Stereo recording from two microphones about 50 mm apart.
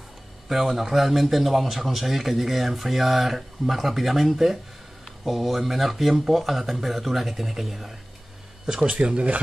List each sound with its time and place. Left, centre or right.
0.5 s a man's voice: centre
8.9 s speech: centre